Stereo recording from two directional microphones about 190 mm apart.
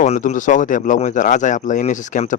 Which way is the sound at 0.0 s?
40° left (ahead or behind).